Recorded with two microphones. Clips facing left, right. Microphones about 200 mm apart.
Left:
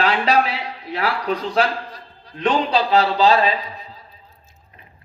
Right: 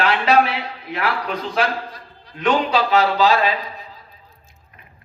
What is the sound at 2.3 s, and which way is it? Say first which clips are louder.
A man's voice: right 1 dB; 30° left (ahead or behind).